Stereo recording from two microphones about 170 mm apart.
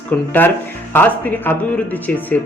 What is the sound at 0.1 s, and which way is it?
A man's voice, 10° left (ahead or behind).